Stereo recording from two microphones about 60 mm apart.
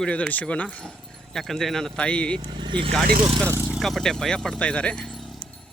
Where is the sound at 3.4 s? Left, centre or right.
Right.